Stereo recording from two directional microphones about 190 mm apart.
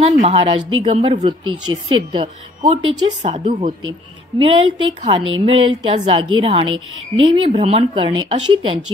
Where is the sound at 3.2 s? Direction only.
40° right (ahead or behind).